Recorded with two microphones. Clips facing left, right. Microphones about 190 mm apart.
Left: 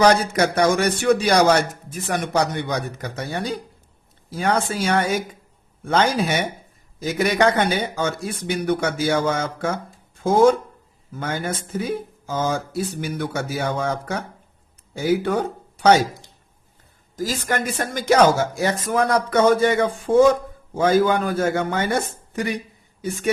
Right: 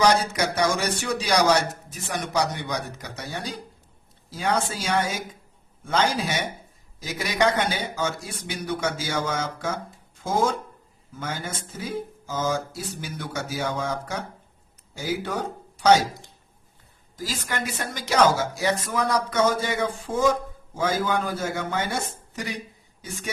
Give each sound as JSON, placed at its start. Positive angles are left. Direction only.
{"t": 0.0, "sound": "a man's voice", "side_deg": 55}
{"t": 17.2, "sound": "a man's voice", "side_deg": 45}